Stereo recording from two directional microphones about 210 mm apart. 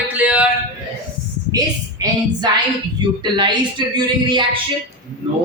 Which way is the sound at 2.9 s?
20° right (ahead or behind).